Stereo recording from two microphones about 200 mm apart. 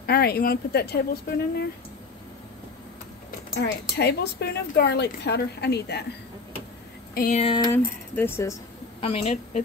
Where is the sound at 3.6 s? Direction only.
55° left (ahead or behind).